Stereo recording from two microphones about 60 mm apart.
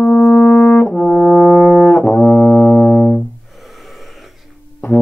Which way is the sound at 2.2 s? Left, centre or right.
Left.